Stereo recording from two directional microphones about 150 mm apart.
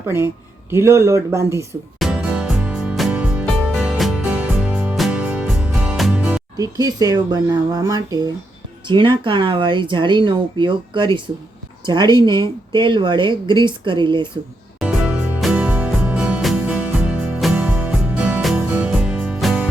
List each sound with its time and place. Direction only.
0.7 s speech: 15° right (ahead or behind)
2.0 s music: 5° right (ahead or behind)
6.6 s speech: 25° right (ahead or behind)
14.8 s music: 5° right (ahead or behind)